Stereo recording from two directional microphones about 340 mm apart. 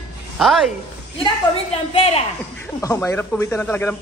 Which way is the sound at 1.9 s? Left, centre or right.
Centre.